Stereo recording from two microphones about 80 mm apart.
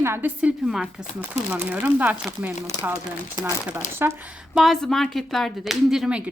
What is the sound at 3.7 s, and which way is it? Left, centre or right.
Speech, right.